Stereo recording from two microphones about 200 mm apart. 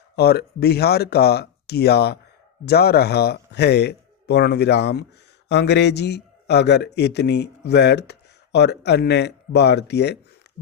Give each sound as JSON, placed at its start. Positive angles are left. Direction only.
{"t": 0.2, "sound": "speech", "side_deg": 55}